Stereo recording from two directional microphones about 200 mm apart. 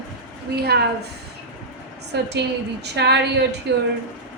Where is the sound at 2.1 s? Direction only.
55° right (ahead or behind).